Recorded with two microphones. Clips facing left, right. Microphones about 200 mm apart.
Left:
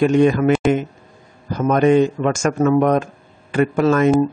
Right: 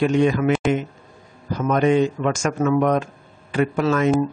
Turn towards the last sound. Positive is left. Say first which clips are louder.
# left 4 dB
turn(degrees=50)  # may be behind; listen again after turning